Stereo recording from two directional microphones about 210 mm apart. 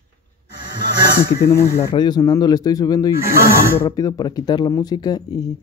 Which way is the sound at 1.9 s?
20° left (ahead or behind).